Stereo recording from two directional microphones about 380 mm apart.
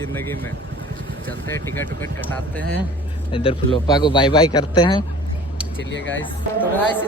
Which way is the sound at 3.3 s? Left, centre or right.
Centre.